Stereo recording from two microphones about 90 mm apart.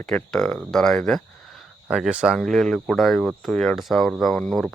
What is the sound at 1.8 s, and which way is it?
Speech, 10° right (ahead or behind).